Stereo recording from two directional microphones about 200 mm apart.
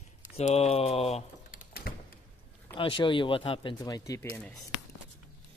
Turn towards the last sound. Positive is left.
turn(degrees=5)  # may be behind; listen again after turning